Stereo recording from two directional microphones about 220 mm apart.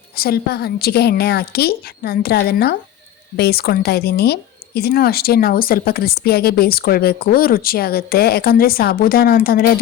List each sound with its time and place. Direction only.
0.2 s a woman's voice: 45° left (ahead or behind)